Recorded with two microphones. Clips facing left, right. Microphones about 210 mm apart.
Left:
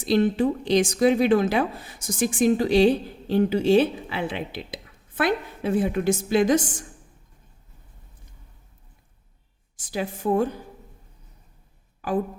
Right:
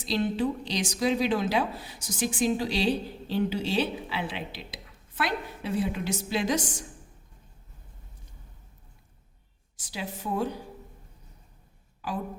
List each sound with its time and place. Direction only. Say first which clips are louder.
0.0 s a woman's voice: left 6 dB; 50° left (ahead or behind)
9.7 s a woman's voice: left 7 dB; 50° left (ahead or behind)